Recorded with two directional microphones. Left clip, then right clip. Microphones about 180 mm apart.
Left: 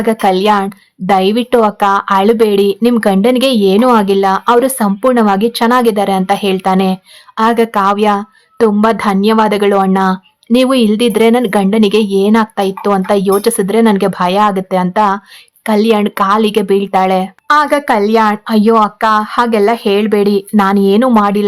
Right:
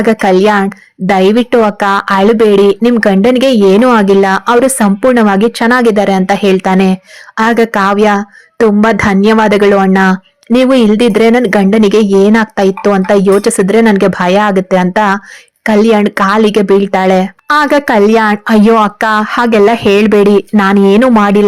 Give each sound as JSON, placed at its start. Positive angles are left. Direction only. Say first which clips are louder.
{"t": 0.0, "sound": "a woman's voice", "louder": "right 3 dB", "side_deg": -20}